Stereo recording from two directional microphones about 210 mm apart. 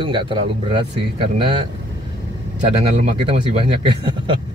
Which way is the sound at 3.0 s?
25° right (ahead or behind).